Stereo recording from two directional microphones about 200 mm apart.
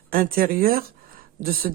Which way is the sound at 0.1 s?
45° right (ahead or behind).